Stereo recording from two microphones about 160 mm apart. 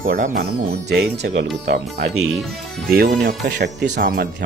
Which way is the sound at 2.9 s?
80° right.